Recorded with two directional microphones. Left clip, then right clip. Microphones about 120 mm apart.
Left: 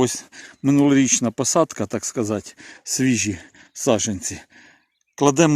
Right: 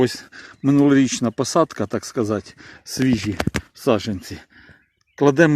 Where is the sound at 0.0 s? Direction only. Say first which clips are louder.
Right 1 dB; 25° left (ahead or behind).